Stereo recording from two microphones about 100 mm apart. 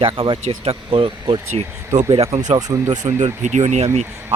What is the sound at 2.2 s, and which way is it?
Speech, 90° right.